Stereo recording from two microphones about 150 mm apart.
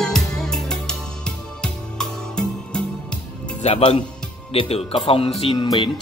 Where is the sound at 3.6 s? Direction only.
45° left (ahead or behind).